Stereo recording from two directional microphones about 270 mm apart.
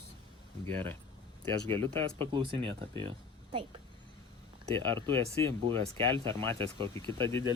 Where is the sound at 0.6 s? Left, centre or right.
Centre.